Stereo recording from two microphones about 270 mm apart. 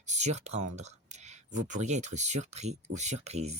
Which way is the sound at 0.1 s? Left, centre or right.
Right.